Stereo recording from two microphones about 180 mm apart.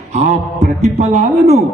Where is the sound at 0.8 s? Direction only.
35° right (ahead or behind).